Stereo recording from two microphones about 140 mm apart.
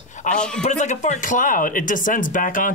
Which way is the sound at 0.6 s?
60° left (ahead or behind).